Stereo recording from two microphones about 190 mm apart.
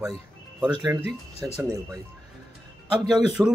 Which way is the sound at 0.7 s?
20° right (ahead or behind).